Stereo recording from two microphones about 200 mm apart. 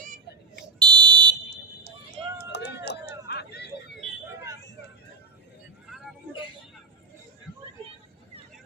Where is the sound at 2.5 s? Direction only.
60° left (ahead or behind).